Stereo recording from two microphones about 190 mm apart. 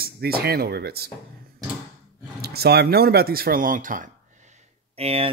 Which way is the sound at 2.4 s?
55° right (ahead or behind).